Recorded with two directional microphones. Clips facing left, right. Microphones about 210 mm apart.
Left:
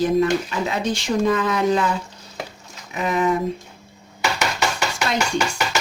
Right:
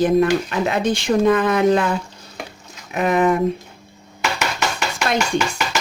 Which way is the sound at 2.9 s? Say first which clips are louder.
Right 4 dB; 60° right (ahead or behind).